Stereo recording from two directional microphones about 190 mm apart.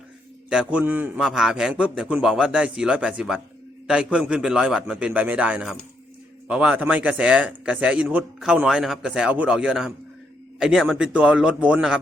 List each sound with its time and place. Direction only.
0.5 s speech: 5° right (ahead or behind)